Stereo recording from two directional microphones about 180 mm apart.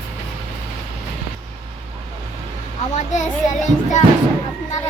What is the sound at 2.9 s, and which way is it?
A child's voice, 40° left (ahead or behind).